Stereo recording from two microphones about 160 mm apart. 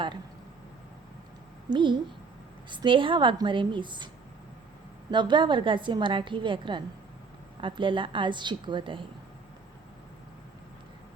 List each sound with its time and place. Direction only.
1.7 s speech: 30° right (ahead or behind)
5.1 s a woman's voice: 30° right (ahead or behind)